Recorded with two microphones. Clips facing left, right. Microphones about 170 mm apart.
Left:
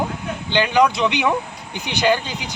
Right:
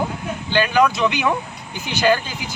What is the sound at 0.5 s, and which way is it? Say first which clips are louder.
Speech: even; 20° left (ahead or behind).